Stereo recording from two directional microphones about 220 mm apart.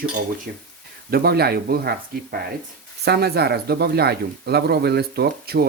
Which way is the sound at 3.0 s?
50° right (ahead or behind).